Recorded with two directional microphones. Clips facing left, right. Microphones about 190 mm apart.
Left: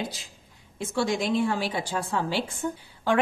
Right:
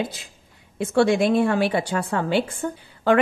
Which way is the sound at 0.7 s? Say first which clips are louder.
Right 8 dB; 60° right (ahead or behind).